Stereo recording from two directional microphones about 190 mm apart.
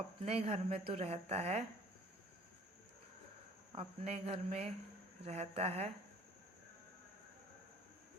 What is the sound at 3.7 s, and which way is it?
Speech, 30° right (ahead or behind).